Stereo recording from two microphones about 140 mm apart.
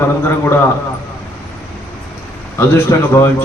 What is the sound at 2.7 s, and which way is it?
Speech, 20° left (ahead or behind).